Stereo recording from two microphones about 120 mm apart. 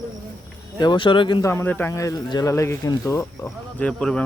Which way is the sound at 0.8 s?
40° left (ahead or behind).